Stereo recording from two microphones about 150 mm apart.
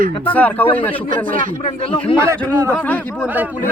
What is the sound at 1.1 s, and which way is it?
Speech, 65° right (ahead or behind).